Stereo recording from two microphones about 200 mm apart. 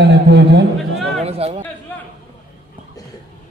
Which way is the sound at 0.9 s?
Centre (ahead or behind).